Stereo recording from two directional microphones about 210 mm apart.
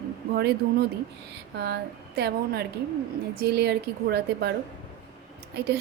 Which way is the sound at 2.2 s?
50° right (ahead or behind).